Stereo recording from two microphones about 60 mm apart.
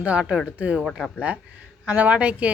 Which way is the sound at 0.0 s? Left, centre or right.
Right.